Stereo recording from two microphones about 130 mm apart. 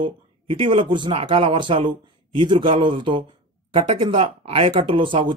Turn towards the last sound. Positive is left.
turn(degrees=-40)  # may be behind; listen again after turning